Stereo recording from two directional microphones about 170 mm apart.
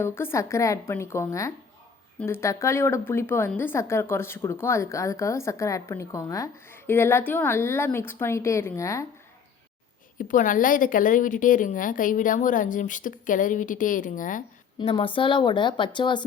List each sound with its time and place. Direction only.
0.0 s a woman's voice: 15° left (ahead or behind)
10.2 s a woman's voice: 50° left (ahead or behind)
14.8 s a woman's voice: 30° left (ahead or behind)